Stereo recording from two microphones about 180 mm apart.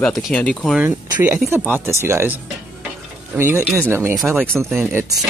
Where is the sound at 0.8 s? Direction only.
10° right (ahead or behind).